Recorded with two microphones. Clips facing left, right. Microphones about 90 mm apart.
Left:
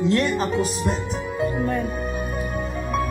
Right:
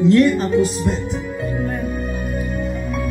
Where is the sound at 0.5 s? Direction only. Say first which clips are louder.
Right 5 dB; 15° left (ahead or behind).